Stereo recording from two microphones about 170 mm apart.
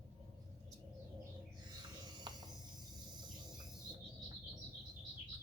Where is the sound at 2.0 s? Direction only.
25° right (ahead or behind).